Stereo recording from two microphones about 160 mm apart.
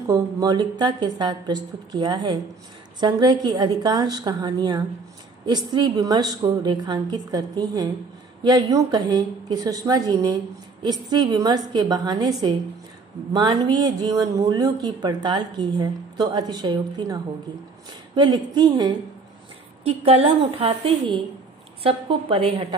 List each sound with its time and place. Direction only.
0.1 s a woman's voice: 25° right (ahead or behind)
19.8 s a woman's voice: 35° right (ahead or behind)